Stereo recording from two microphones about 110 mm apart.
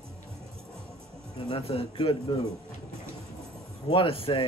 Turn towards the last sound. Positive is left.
turn(degrees=55)  # may be behind; listen again after turning